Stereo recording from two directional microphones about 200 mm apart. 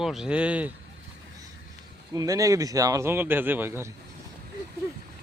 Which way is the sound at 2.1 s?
15° right (ahead or behind).